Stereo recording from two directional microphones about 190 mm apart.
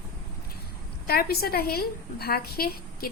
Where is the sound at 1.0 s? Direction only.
55° left (ahead or behind).